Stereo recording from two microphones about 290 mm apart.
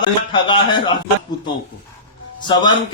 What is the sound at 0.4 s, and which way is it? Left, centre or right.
Speech, centre.